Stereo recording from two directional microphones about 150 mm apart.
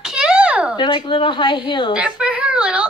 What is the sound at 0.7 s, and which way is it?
Speech, 35° left (ahead or behind).